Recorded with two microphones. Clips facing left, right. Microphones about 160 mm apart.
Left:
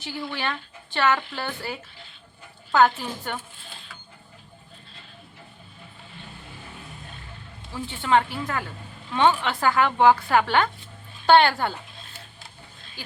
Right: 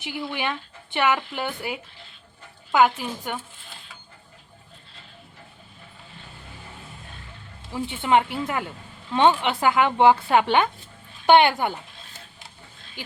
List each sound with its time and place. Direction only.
0.0 s speech: 15° right (ahead or behind)
7.7 s speech: 20° right (ahead or behind)